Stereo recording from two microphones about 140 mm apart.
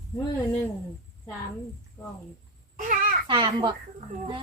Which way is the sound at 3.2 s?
35° right (ahead or behind).